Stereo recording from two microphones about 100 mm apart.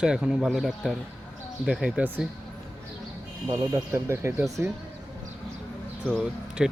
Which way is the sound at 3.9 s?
25° right (ahead or behind).